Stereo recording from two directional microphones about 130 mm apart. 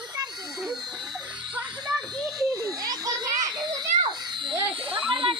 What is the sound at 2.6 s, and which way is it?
Children playing, 25° right (ahead or behind).